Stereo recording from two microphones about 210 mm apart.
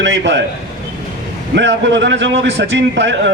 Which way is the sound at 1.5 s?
60° right (ahead or behind).